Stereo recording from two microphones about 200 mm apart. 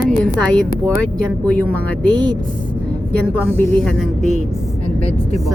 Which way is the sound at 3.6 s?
5° left (ahead or behind).